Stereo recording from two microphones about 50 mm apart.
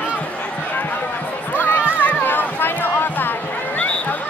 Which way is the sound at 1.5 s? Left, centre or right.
Left.